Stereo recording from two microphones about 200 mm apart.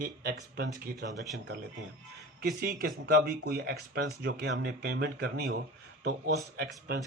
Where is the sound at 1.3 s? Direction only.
55° right (ahead or behind).